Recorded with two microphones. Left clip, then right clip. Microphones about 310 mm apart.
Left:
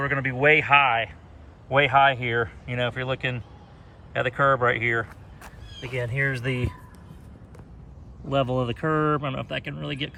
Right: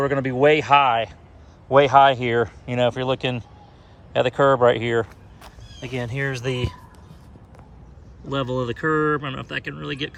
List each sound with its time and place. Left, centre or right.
0.0 s speech: centre
8.3 s speech: centre